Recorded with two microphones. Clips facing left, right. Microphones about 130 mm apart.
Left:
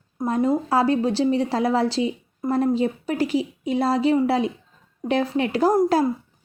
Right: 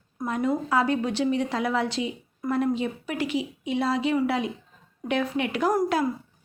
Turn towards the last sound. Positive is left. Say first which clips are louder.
# left 5 dB
turn(degrees=30)  # may be behind; listen again after turning